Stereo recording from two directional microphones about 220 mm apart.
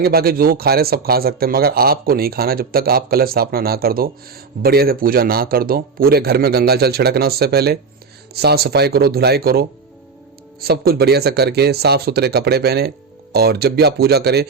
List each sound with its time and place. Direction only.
0.0 s speech: 45° right (ahead or behind)